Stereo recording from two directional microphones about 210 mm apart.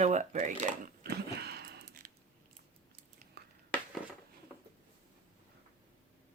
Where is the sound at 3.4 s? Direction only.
50° right (ahead or behind).